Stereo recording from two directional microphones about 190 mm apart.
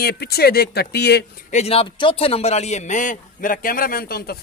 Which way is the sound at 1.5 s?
30° left (ahead or behind).